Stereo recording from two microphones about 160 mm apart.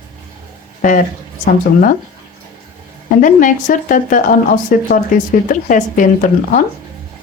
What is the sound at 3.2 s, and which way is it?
A woman's voice, 55° left (ahead or behind).